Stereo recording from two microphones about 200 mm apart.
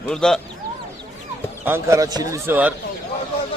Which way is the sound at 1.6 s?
10° right (ahead or behind).